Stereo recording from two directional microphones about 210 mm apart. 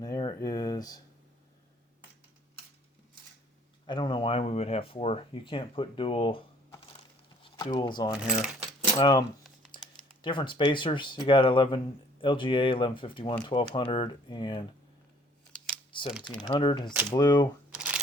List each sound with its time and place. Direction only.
0.0 s a sound: 20° left (ahead or behind)
3.8 s speech: 20° left (ahead or behind)
7.4 s speech: 20° left (ahead or behind)
15.9 s speech: 25° left (ahead or behind)
17.7 s camera: 5° right (ahead or behind)